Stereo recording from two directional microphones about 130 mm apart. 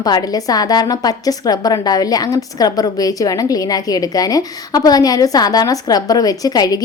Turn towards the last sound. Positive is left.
turn(degrees=30)  # may be behind; listen again after turning